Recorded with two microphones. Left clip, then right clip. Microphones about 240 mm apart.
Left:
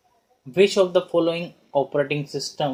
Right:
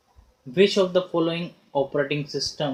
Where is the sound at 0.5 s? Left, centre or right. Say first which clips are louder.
Left 2 dB; left.